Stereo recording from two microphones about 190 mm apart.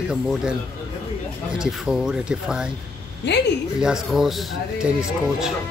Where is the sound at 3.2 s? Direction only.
65° left (ahead or behind).